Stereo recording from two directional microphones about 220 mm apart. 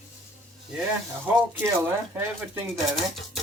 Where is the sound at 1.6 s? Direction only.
10° right (ahead or behind).